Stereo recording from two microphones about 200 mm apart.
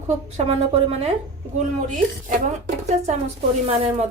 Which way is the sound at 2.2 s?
35° right (ahead or behind).